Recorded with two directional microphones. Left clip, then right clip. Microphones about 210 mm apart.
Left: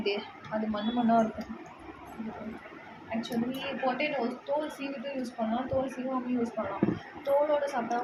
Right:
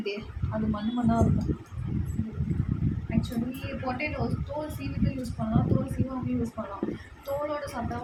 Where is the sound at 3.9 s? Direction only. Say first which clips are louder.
Left 2 dB; 50° right (ahead or behind).